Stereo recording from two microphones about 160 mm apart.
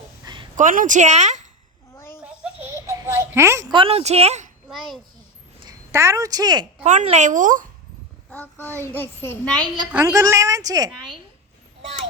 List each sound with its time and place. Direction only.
0.5 s speech: 55° right (ahead or behind)
2.0 s a sound: 15° left (ahead or behind)
2.2 s baby laughter: 10° right (ahead or behind)
2.6 s a sound: 20° right (ahead or behind)
3.7 s speech: 35° right (ahead or behind)
5.9 s speech: 20° right (ahead or behind)
6.8 s speech: 50° right (ahead or behind)
8.3 s a child's voice: 10° left (ahead or behind)
9.9 s speech: 20° right (ahead or behind)